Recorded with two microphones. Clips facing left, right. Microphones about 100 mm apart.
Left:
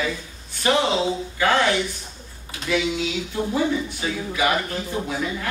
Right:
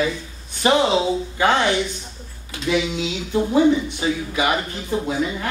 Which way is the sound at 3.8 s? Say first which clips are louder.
Right 4 dB; 20° right (ahead or behind).